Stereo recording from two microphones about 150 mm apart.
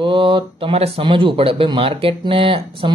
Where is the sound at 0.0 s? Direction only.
35° right (ahead or behind).